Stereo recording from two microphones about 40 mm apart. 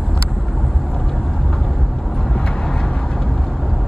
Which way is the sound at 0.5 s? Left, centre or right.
Centre.